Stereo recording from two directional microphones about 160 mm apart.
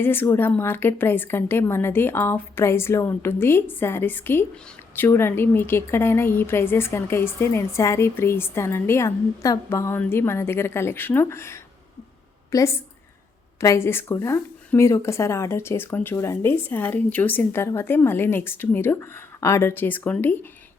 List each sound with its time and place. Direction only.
0.0 s a woman's voice: 15° left (ahead or behind)